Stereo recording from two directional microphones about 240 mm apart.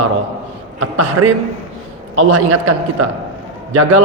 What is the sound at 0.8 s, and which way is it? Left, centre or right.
A man's voice, right.